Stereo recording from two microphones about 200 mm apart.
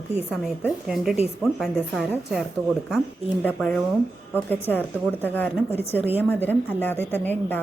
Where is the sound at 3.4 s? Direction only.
5° left (ahead or behind).